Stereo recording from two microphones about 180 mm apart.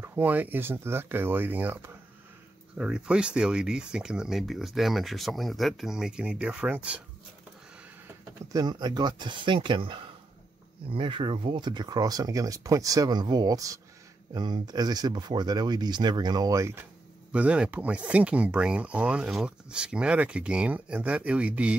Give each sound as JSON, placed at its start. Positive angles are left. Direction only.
{"t": 0.0, "sound": "speech", "side_deg": -10}
{"t": 8.5, "sound": "speech", "side_deg": -25}